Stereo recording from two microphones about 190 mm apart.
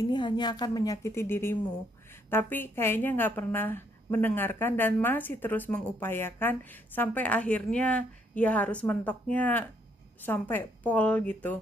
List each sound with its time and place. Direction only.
0.0 s a woman's voice: 25° left (ahead or behind); by 11.5 s 5° left (ahead or behind)